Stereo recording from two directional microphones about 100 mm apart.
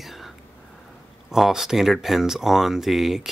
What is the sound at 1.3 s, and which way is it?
Speech, 5° right (ahead or behind).